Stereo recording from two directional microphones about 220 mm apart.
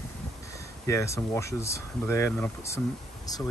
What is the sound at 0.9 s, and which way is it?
Speech, 15° left (ahead or behind).